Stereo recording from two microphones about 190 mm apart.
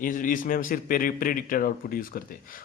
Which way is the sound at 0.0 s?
45° left (ahead or behind).